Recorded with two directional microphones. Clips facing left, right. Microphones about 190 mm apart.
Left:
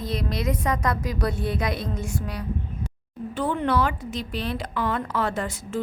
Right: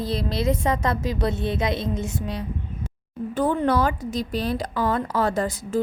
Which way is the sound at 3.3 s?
45° right (ahead or behind).